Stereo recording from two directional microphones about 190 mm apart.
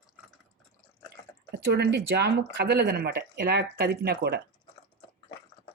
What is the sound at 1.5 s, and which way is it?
Speech, 60° right (ahead or behind).